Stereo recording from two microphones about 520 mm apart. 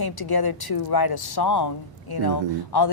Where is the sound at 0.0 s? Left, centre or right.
Left.